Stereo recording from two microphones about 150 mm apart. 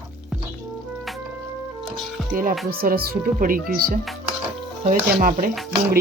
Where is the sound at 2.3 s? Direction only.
65° right (ahead or behind).